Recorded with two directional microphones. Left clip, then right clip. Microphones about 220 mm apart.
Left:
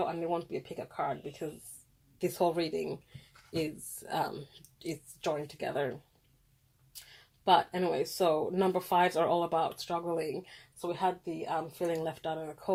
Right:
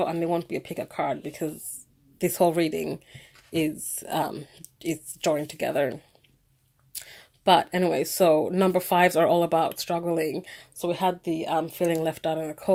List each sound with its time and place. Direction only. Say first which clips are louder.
0.0 s a woman's voice: right 7 dB; 35° right (ahead or behind)
7.1 s speech: right 6 dB; 35° right (ahead or behind)